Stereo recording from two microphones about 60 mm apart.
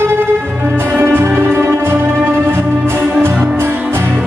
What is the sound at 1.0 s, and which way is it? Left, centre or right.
Music, right.